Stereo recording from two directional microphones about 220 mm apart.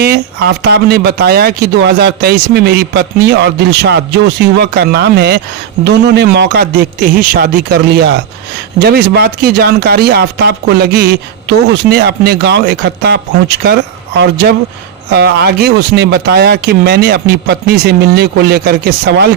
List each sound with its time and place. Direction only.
0.0 s speech: 45° right (ahead or behind)